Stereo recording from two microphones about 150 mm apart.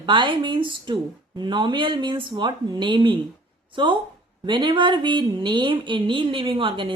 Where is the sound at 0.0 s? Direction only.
35° right (ahead or behind).